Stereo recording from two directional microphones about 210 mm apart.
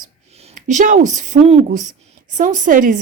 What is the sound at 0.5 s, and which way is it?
Speech, 35° right (ahead or behind).